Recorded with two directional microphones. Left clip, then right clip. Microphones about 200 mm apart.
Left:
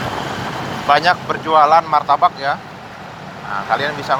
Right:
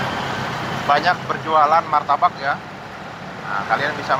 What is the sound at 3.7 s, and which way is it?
Speech, 60° left (ahead or behind).